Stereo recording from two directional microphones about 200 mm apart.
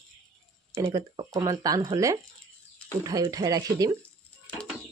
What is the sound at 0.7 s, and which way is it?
Speech, 15° right (ahead or behind).